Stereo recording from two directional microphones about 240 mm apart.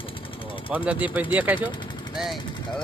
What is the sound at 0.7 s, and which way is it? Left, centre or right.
Speech, centre.